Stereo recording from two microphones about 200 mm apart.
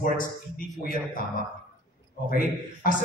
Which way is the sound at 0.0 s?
45° left (ahead or behind).